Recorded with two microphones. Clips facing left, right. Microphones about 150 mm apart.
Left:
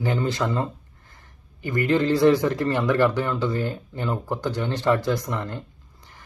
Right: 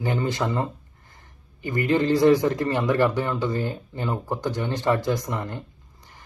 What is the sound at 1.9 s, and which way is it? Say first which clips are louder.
Speech: even; 15° right (ahead or behind).